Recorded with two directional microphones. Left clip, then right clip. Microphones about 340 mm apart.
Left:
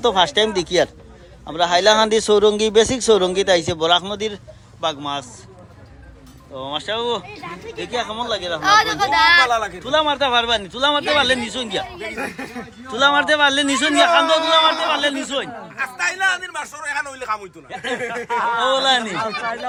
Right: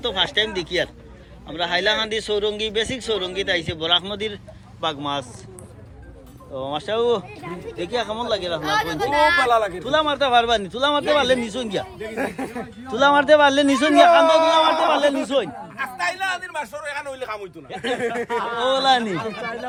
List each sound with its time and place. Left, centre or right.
0.0 s a man's voice: centre
6.5 s a man's voice: centre
9.4 s speech: centre
9.8 s a man's voice: centre
12.1 s speech: right
12.9 s a man's voice: centre
18.5 s a man's voice: centre